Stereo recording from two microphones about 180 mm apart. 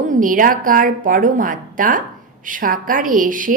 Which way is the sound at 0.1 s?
50° right (ahead or behind).